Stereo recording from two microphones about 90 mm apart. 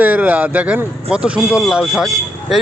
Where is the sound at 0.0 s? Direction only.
15° right (ahead or behind).